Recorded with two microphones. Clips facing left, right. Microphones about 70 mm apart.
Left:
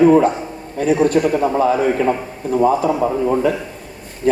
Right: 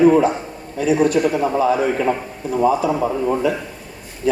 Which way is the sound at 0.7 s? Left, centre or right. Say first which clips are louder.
Left 1 dB; left.